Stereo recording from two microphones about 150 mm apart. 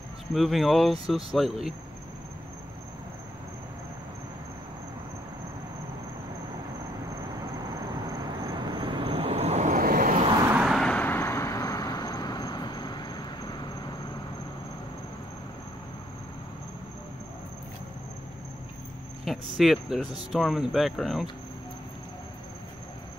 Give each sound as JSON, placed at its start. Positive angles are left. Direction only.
{"t": 0.3, "sound": "speech", "side_deg": 0}
{"t": 8.4, "sound": "vehicle", "side_deg": -30}
{"t": 9.7, "sound": "vehicle", "side_deg": -70}
{"t": 10.6, "sound": "vehicle", "side_deg": 0}
{"t": 19.2, "sound": "cricket", "side_deg": 0}
{"t": 20.2, "sound": "speech", "side_deg": 0}